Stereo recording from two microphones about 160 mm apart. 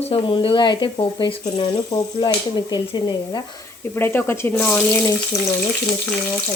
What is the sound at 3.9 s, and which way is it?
Frying, 15° left (ahead or behind).